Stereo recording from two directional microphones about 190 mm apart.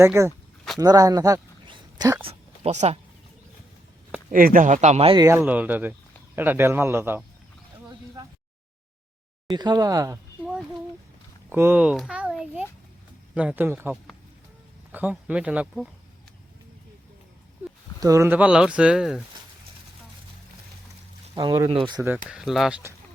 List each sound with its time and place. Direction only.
0.0 s a man's voice: 15° right (ahead or behind)
2.6 s speech: 35° right (ahead or behind)
4.3 s speech: 45° right (ahead or behind); by 5.2 s 30° right (ahead or behind)
5.2 s a man's voice: 15° right (ahead or behind)
7.9 s a sound: 20° right (ahead or behind)
9.5 s speech: 20° right (ahead or behind)
11.4 s a child's voice: 10° right (ahead or behind)
14.9 s a child's voice: 5° right (ahead or behind)
18.0 s a child's voice: 15° right (ahead or behind)
21.3 s speech: 20° right (ahead or behind)
22.3 s a child's voice: centre (ahead or behind)